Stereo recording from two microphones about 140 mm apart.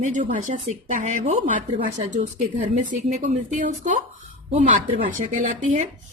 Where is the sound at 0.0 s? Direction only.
60° right (ahead or behind).